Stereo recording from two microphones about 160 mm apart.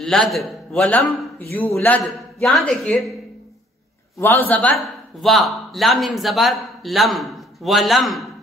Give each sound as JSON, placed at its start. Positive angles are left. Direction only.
{"t": 0.0, "sound": "a man's voice", "side_deg": 5}
{"t": 4.2, "sound": "a man's voice", "side_deg": 10}